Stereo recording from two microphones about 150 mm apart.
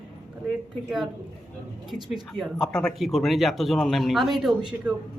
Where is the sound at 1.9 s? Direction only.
Centre (ahead or behind).